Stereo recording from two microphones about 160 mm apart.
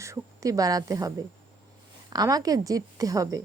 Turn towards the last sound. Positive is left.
turn(degrees=-20)  # may be behind; listen again after turning